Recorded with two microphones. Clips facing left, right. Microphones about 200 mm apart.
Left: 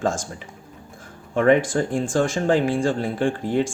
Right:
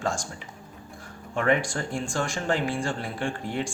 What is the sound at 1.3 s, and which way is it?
Speech, 50° left (ahead or behind).